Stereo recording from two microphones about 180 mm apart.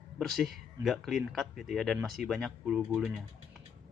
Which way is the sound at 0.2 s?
Centre (ahead or behind).